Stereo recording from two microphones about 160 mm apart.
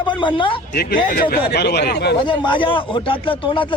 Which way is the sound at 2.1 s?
30° left (ahead or behind).